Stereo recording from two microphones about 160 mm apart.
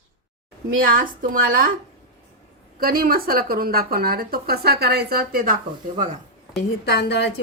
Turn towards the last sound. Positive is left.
turn(degrees=90)